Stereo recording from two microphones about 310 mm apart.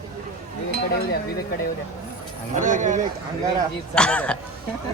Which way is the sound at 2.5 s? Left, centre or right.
Right.